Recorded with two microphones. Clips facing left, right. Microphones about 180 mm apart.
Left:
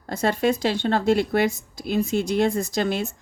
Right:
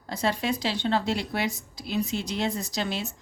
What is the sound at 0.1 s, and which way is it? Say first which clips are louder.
A woman's voice: left 6 dB; 50° left (ahead or behind).